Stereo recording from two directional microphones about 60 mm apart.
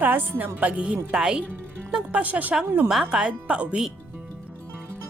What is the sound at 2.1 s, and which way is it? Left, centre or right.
A woman's voice, right.